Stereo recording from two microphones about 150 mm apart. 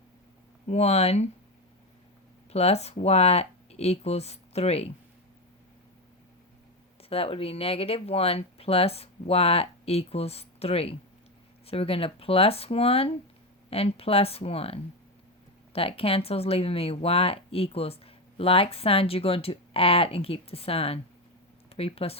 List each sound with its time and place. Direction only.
0.7 s speech: 45° left (ahead or behind)
2.5 s speech: 45° left (ahead or behind)
7.1 s speech: 40° left (ahead or behind)